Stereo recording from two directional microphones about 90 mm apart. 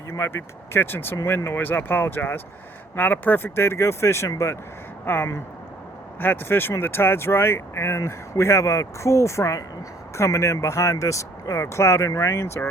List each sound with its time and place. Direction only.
0.1 s speech: 30° left (ahead or behind)